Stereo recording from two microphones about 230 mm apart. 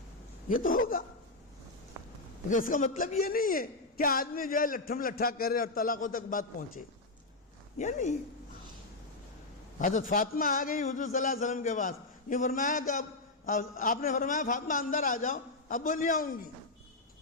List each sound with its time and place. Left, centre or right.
0.4 s a man's voice: left
2.5 s a man's voice: left
9.7 s a man's voice: left